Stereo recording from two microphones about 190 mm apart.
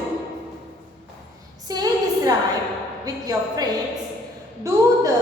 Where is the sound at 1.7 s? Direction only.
20° right (ahead or behind).